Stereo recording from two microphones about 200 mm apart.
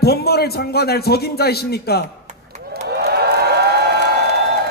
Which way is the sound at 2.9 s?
55° right (ahead or behind).